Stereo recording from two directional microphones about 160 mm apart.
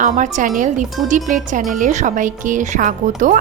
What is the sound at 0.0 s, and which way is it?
A woman's voice, 55° right (ahead or behind).